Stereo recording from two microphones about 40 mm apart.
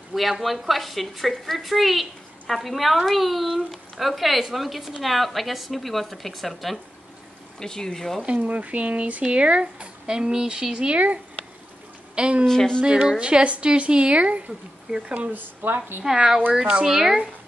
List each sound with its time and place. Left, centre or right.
0.1 s a woman's voice: centre
7.5 s speech: centre
8.5 s speech: right
10.9 s speech: right
12.2 s speech: right
12.4 s speech: centre
12.8 s speech: centre
15.3 s speech: right
16.0 s speech: centre